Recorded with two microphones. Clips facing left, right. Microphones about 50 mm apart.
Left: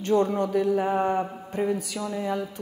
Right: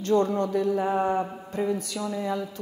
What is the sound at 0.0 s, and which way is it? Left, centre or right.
Mantra, centre.